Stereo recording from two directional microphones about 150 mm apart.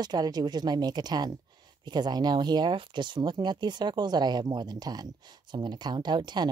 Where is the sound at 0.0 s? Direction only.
25° right (ahead or behind).